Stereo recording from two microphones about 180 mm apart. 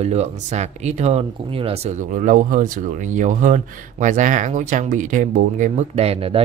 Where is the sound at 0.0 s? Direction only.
40° right (ahead or behind).